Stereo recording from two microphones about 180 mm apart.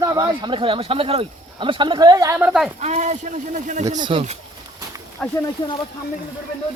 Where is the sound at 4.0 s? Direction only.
30° right (ahead or behind).